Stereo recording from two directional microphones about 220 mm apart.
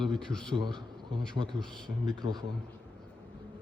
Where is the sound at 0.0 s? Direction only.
5° left (ahead or behind).